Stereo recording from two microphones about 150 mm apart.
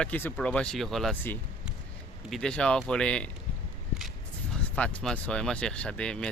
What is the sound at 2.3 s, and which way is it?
Speech, 5° left (ahead or behind).